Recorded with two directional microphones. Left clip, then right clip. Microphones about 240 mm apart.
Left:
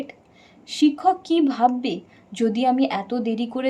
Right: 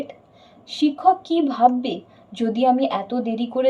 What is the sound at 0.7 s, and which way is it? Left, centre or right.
A woman's voice, left.